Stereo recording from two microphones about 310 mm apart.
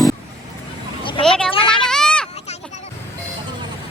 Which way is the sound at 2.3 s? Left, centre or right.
Left.